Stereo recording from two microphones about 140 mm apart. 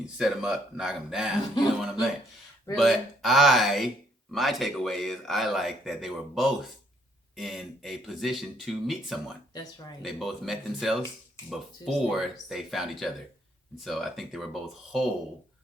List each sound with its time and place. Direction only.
0.0 s speech: centre (ahead or behind)